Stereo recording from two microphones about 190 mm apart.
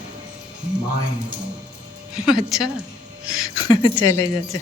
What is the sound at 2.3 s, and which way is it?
Speech, centre (ahead or behind).